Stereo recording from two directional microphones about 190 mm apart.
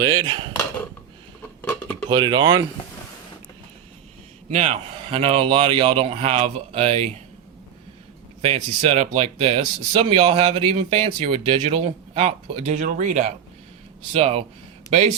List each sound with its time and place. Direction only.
0.0 s speech: 25° right (ahead or behind)
1.6 s dishes: 10° left (ahead or behind)
2.0 s speech: 25° right (ahead or behind)
4.4 s speech: 35° right (ahead or behind)
8.4 s speech: 35° right (ahead or behind)